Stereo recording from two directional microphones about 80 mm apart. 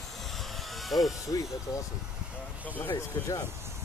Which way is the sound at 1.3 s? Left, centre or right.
Left.